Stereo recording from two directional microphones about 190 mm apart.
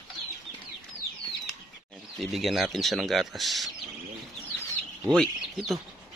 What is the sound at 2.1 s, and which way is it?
Speech, centre (ahead or behind).